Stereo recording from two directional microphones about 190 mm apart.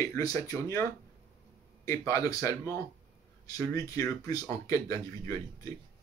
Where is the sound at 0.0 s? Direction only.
15° left (ahead or behind).